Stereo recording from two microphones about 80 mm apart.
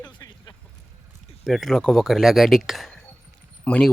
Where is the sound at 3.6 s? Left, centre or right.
Centre.